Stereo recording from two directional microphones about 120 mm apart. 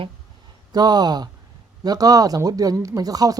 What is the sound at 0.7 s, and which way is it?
Speech, 35° right (ahead or behind).